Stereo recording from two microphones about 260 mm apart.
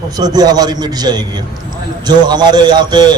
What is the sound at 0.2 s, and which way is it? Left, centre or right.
A man's voice, centre.